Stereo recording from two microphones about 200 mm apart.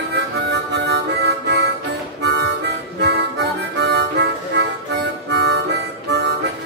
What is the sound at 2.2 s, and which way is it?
Harmonica, 60° right (ahead or behind).